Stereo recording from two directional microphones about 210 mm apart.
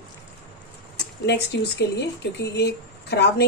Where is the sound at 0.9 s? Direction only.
55° left (ahead or behind).